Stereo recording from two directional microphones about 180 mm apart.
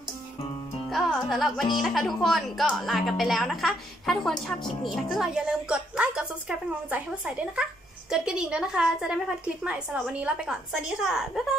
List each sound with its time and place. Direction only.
0.9 s a woman's voice: centre (ahead or behind)